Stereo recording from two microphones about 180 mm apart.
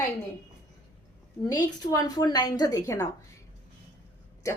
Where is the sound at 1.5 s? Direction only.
20° left (ahead or behind).